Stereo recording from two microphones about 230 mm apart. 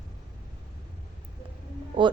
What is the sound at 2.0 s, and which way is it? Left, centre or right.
Speech, right.